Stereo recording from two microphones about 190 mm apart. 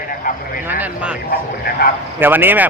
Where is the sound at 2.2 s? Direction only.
10° right (ahead or behind).